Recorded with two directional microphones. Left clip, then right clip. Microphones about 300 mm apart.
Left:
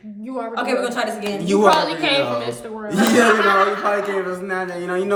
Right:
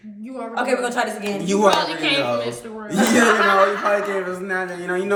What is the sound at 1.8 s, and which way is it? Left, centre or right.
Speech, centre.